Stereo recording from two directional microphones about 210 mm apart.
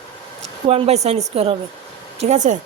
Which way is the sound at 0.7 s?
30° right (ahead or behind).